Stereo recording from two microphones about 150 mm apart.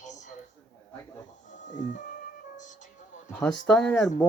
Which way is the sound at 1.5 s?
55° left (ahead or behind).